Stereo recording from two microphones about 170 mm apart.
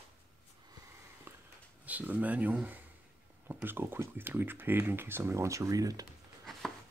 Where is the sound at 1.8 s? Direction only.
10° right (ahead or behind).